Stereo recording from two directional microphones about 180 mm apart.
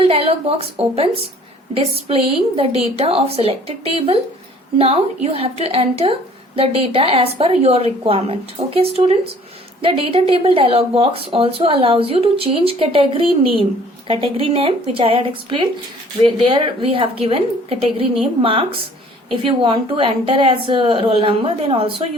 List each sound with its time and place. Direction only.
0.0 s a woman's voice: 30° right (ahead or behind)